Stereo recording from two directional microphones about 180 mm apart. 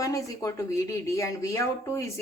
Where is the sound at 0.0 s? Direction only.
20° left (ahead or behind).